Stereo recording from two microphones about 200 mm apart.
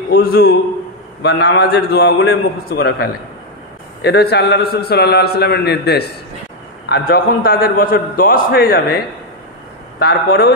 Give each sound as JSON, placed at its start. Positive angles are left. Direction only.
{"t": 0.1, "sound": "a man's voice", "side_deg": 50}